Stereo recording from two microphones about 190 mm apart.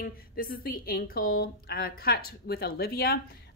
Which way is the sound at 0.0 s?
50° left (ahead or behind).